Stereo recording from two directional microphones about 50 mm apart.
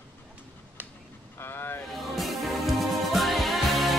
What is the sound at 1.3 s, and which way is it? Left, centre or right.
Boat, left.